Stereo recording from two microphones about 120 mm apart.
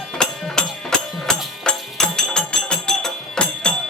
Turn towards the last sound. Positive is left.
turn(degrees=5)  # may be behind; listen again after turning